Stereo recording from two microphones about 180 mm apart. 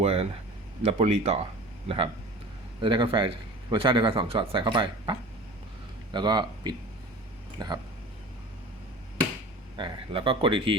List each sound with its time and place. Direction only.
0.0 s a sound: 35° right (ahead or behind)
0.9 s speech: 35° right (ahead or behind)
2.8 s a man's voice: 25° right (ahead or behind)
6.1 s a man's voice: 25° right (ahead or behind)
9.7 s a man's voice: 30° right (ahead or behind)